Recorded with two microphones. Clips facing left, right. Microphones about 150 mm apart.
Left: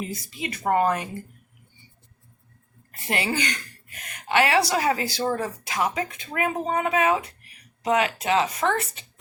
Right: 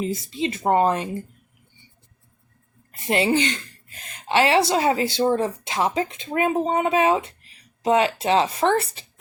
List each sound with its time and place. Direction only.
0.0 s a woman's voice: 25° right (ahead or behind)
2.9 s a woman's voice: 20° right (ahead or behind)